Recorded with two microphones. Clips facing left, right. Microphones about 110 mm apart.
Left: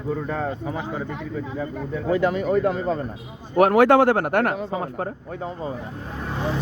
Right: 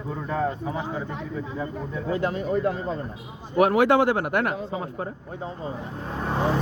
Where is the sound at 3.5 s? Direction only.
55° left (ahead or behind).